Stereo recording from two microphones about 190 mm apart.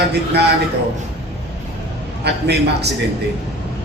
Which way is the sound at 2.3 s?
60° right (ahead or behind).